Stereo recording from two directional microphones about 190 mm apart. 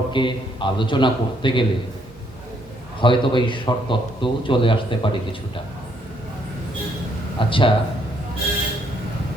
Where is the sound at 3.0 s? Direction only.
25° left (ahead or behind).